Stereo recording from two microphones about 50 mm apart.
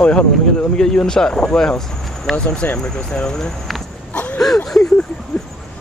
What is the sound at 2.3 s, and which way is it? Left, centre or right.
Speech, centre.